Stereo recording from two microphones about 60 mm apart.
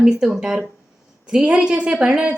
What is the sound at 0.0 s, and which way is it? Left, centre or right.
A woman's voice, centre.